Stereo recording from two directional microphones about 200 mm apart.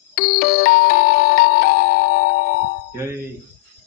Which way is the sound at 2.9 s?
10° right (ahead or behind).